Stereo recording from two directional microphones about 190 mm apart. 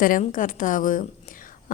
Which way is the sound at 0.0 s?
45° left (ahead or behind).